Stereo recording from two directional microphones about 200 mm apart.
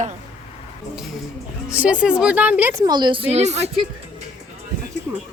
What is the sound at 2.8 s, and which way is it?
Speech, 20° right (ahead or behind).